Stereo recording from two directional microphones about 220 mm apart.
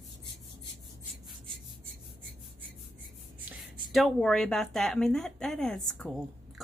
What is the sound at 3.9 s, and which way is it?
A woman's voice, centre (ahead or behind).